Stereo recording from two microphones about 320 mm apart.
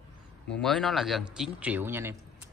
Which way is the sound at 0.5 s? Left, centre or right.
Centre.